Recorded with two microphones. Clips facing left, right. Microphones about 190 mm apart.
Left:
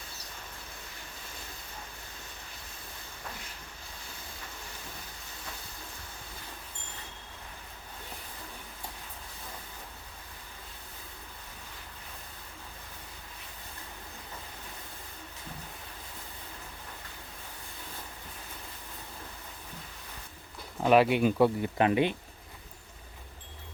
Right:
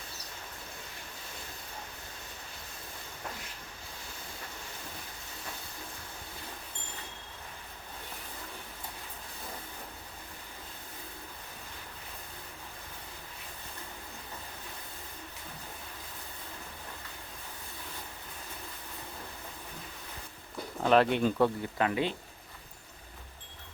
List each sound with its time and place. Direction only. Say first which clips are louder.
20.8 s speech: left 2 dB; 10° left (ahead or behind)